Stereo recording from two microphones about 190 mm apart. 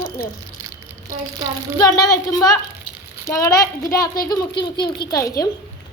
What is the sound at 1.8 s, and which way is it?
A woman's voice, 20° left (ahead or behind).